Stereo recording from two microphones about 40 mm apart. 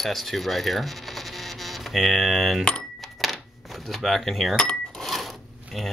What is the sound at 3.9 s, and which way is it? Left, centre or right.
Speech, centre.